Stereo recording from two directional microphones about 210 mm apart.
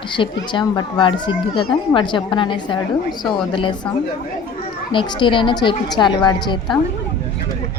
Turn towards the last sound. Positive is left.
turn(degrees=20)  # may be behind; listen again after turning